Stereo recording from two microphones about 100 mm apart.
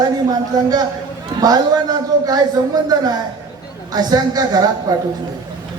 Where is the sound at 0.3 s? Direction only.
40° right (ahead or behind).